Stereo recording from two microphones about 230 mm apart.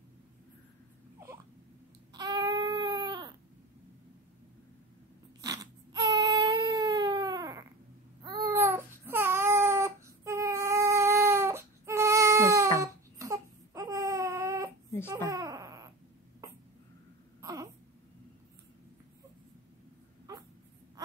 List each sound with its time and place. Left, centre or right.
2.1 s baby cry: centre
5.4 s baby cry: centre
17.4 s a sound: centre